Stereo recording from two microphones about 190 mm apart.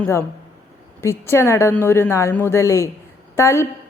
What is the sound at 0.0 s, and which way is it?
A woman's voice, 15° left (ahead or behind).